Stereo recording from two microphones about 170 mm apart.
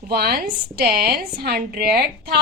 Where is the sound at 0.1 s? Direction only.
65° right (ahead or behind).